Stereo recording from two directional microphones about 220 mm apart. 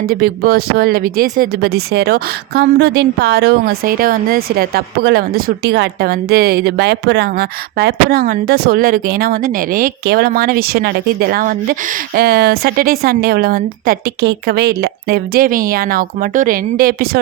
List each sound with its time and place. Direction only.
0.1 s speech: 45° right (ahead or behind)